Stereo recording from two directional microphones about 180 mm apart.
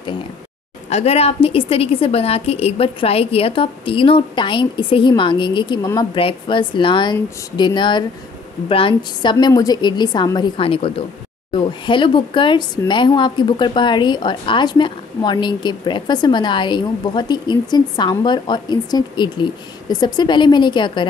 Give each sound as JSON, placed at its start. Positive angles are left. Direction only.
{"t": 0.8, "sound": "a woman's voice", "side_deg": 35}